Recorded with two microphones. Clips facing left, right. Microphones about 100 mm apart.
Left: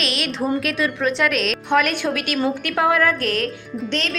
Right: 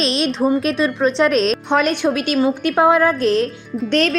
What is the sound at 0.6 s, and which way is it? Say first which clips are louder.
A woman's voice: right 4 dB; 30° right (ahead or behind).